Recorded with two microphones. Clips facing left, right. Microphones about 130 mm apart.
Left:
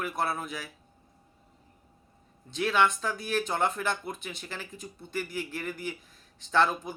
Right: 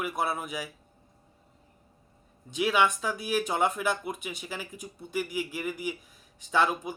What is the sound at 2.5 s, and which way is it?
Speech, 10° right (ahead or behind).